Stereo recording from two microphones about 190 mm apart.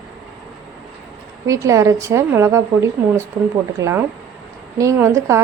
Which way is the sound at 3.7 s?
15° right (ahead or behind).